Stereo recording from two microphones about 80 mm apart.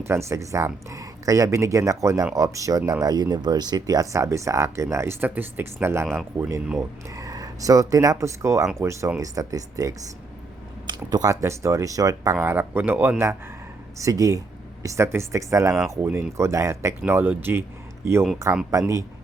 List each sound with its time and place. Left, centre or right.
0.0 s speech: right
6.7 s speech: right
12.4 s speech: right
14.0 s speech: right
14.8 s speech: right
17.1 s speech: right
18.0 s speech: right